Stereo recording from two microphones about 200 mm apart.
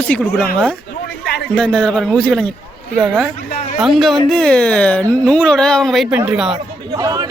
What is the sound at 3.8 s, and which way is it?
Speech, centre (ahead or behind).